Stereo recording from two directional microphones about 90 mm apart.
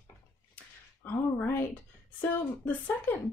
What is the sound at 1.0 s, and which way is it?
Female singing, 25° left (ahead or behind).